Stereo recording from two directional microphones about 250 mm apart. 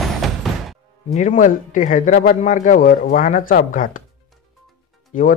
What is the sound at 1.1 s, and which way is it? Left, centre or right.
A man's voice, left.